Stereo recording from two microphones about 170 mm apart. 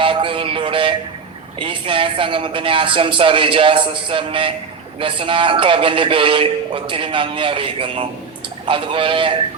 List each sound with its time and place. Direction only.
0.0 s music: 30° right (ahead or behind)
1.5 s a man's voice: 30° right (ahead or behind)